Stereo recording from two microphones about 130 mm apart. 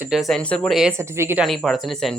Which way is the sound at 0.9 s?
20° right (ahead or behind).